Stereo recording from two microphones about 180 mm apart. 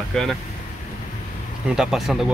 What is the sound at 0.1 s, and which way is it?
Speech, centre (ahead or behind).